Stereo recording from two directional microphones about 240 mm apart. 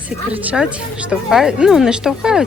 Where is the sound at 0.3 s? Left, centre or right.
Centre.